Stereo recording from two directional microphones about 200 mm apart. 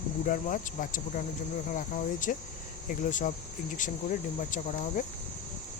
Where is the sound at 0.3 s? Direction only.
40° left (ahead or behind).